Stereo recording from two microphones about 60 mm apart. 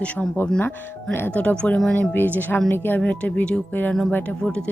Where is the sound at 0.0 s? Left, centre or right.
Left.